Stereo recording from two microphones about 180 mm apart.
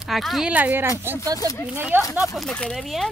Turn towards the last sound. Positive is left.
turn(degrees=0)  # may be behind; listen again after turning